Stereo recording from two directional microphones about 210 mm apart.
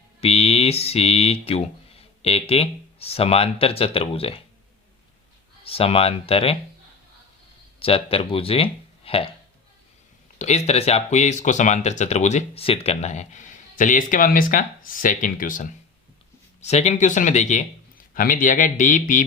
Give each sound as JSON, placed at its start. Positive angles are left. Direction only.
{"t": 0.2, "sound": "speech", "side_deg": 30}
{"t": 5.6, "sound": "speech", "side_deg": 25}
{"t": 7.8, "sound": "speech", "side_deg": 25}
{"t": 10.3, "sound": "speech", "side_deg": 30}